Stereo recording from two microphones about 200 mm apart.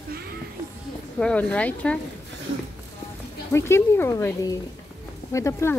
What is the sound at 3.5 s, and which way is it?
A woman's voice, 15° left (ahead or behind).